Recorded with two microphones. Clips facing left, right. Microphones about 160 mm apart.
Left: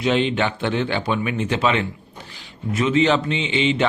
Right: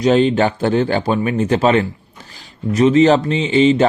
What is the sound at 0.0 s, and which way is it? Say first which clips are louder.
A man's voice: right 7 dB; 40° right (ahead or behind).